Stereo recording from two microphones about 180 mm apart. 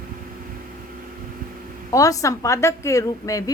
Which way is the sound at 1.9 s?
20° left (ahead or behind).